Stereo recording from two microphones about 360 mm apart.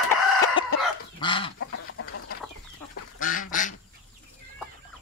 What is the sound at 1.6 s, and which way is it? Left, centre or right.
Chicken, left.